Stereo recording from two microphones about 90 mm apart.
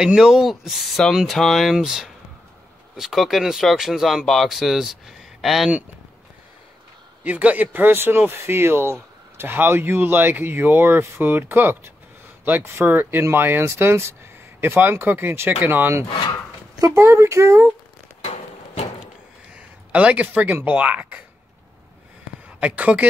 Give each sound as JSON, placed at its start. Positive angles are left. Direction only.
{"t": 0.0, "sound": "speech", "side_deg": -5}
{"t": 7.2, "sound": "speech", "side_deg": -15}
{"t": 16.7, "sound": "speech", "side_deg": -40}
{"t": 17.0, "sound": "speech", "side_deg": -30}
{"t": 19.5, "sound": "speech", "side_deg": -15}
{"t": 22.6, "sound": "speech", "side_deg": -15}